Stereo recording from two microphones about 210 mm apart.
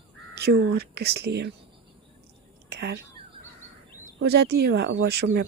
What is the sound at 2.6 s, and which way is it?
Whispering, 50° right (ahead or behind).